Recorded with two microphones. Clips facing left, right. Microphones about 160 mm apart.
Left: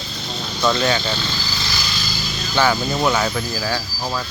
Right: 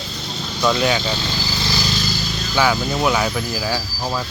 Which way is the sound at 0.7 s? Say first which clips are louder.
Right 1 dB; 15° right (ahead or behind).